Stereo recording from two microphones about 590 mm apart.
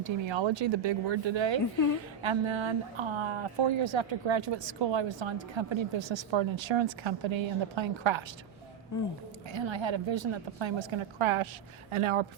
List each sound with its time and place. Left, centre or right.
0.3 s speech: right
9.5 s speech: right